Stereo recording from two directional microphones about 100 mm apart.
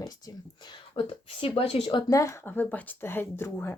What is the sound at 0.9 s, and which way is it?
Speech, 65° left (ahead or behind).